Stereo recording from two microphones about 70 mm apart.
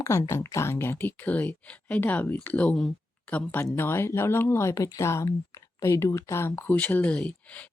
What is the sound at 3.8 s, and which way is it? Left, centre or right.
Speech, left.